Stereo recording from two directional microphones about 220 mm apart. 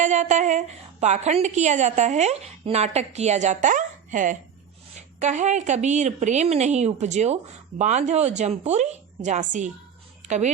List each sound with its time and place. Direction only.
0.0 s a woman's voice: 35° right (ahead or behind)